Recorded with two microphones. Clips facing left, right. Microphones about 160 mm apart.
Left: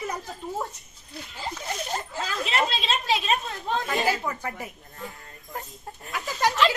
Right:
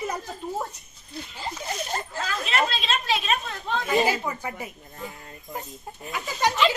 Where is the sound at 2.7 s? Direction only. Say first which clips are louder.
Even; 25° left (ahead or behind).